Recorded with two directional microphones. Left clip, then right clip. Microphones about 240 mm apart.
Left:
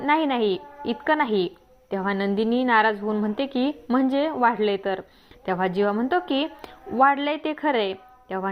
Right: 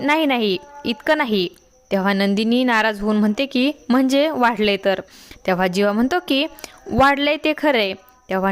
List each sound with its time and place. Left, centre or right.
0.0 s a woman's voice: right